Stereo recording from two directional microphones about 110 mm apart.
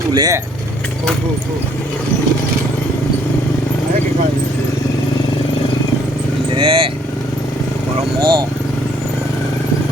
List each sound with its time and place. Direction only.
0.1 s speech: 40° right (ahead or behind)
6.6 s speech: 55° right (ahead or behind)
8.2 s speech: 45° right (ahead or behind)